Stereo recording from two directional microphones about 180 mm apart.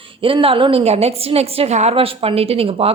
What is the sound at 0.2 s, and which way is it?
A woman's voice, 30° right (ahead or behind).